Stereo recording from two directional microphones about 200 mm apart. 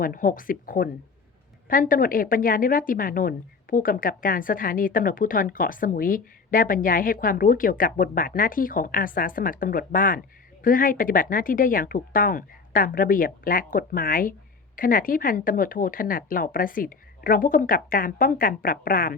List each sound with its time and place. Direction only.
0.0 s a woman's voice: 45° left (ahead or behind)